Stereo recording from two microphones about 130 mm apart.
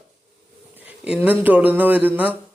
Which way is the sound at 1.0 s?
10° right (ahead or behind).